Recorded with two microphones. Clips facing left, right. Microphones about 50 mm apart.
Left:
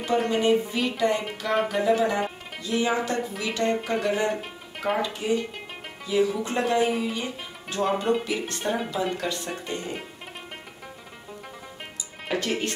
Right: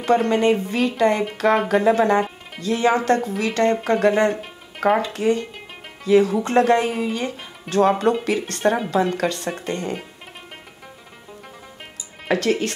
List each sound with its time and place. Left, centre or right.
0.3 s speech: right
2.6 s speech: right
4.3 s music: centre
5.1 s speech: right
7.7 s speech: right
12.3 s speech: right